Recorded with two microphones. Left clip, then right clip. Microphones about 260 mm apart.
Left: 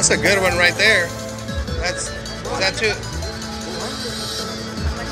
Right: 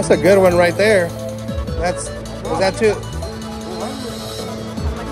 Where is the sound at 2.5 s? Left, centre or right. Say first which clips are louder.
Right 4 dB; right.